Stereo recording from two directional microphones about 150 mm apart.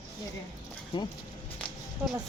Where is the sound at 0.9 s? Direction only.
35° left (ahead or behind).